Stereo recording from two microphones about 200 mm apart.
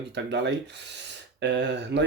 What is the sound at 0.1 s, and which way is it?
Speech, 60° right (ahead or behind).